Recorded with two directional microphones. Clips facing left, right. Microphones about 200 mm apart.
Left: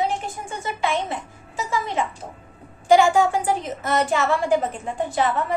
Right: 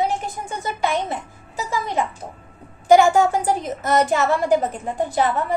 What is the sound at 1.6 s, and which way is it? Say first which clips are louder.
Music: right 1 dB; 35° right (ahead or behind).